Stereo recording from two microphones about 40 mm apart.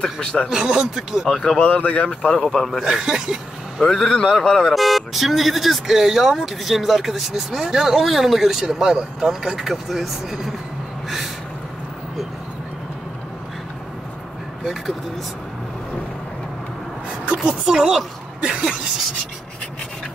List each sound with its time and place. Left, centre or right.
0.0 s speech: left
0.5 s a woman's voice: centre
1.2 s speech: centre
1.6 s speech: left
2.4 s speech: centre
2.8 s speech: centre
3.8 s speech: centre
4.7 s speech: centre
8.6 s speech: centre
14.6 s speech: centre
17.4 s a woman's voice: right